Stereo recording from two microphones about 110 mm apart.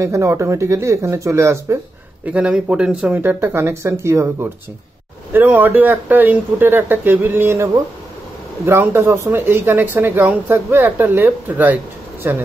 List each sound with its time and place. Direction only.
0.0 s speech: 25° right (ahead or behind)
2.2 s speech: 10° right (ahead or behind)